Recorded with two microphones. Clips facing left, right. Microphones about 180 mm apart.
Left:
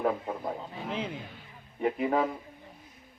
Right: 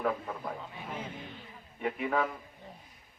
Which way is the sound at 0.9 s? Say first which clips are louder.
Left 7 dB; 90° left.